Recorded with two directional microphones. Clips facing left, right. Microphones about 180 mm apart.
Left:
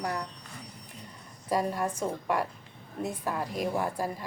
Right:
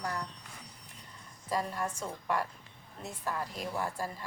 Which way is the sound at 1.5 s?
15° left (ahead or behind).